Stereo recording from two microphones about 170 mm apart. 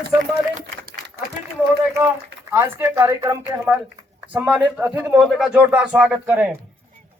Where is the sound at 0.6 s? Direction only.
90° right.